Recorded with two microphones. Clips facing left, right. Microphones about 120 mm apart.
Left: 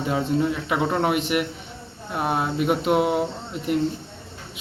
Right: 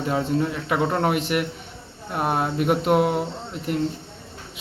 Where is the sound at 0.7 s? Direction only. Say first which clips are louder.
Right 3 dB; 10° left (ahead or behind).